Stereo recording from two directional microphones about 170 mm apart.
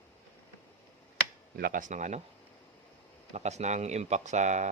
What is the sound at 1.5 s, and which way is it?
Speech, 55° right (ahead or behind).